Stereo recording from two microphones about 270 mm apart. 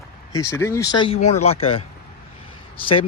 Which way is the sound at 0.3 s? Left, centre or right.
Centre.